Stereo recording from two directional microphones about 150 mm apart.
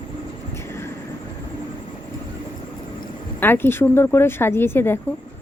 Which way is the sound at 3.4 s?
15° left (ahead or behind).